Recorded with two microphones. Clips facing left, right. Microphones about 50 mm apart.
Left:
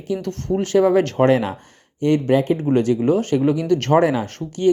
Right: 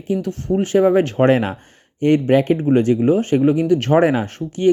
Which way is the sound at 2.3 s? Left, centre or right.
Right.